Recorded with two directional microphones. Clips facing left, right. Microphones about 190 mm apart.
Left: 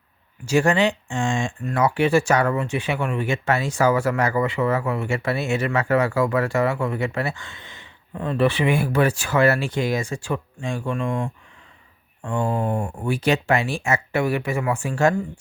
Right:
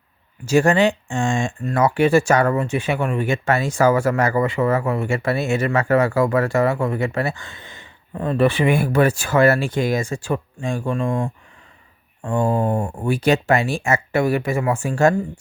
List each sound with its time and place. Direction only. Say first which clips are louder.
0.4 s speech: right 3 dB; 45° right (ahead or behind)
13.1 s speech: right 3 dB; 45° right (ahead or behind)